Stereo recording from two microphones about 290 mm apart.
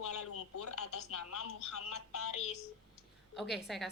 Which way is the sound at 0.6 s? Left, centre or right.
Left.